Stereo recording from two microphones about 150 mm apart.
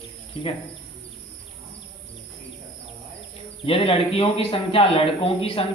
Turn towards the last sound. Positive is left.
turn(degrees=40)  # may be behind; listen again after turning